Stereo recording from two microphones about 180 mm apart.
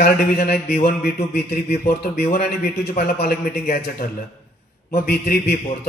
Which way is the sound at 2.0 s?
60° left (ahead or behind).